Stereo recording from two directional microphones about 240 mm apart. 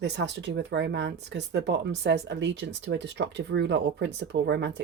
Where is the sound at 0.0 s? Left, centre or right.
Right.